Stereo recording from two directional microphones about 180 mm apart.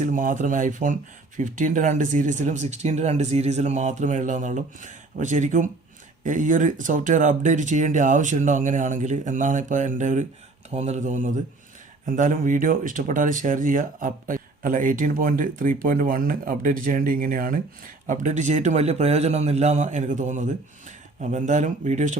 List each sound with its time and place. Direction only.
0.0 s a man's voice: 45° right (ahead or behind)